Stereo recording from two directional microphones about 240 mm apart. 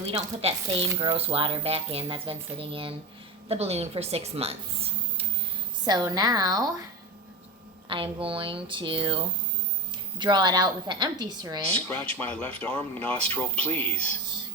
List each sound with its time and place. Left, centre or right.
0.0 s a woman's voice: right
7.9 s a woman's voice: right
12.1 s speech: centre
13.9 s speech: right